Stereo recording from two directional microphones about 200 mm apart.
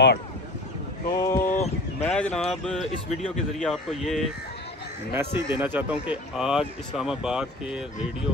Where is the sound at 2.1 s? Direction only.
5° left (ahead or behind).